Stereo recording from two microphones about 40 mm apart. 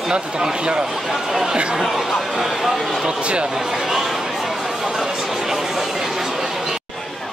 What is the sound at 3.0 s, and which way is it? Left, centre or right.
Speech, right.